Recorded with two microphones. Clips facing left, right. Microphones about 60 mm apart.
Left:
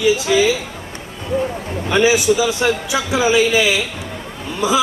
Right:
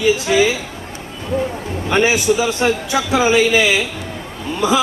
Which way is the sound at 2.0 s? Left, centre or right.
Right.